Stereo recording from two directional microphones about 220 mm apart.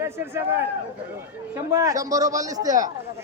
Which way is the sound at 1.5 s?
15° right (ahead or behind).